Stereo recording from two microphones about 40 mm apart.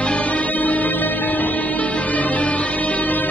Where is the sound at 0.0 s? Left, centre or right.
Left.